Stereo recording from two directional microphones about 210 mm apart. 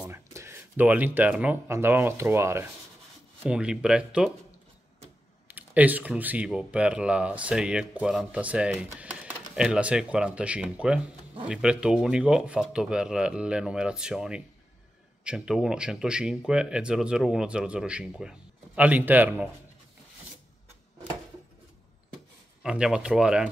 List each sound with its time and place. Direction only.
0.0 s speech: 15° right (ahead or behind)
5.5 s a man's voice: 10° right (ahead or behind)
22.6 s speech: 5° right (ahead or behind)